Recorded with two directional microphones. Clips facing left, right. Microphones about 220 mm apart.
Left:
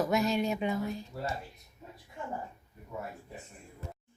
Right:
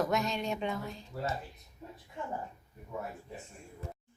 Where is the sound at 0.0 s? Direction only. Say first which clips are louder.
Left 3 dB; 5° left (ahead or behind).